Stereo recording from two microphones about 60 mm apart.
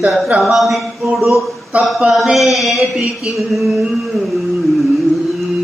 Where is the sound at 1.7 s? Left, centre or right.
Right.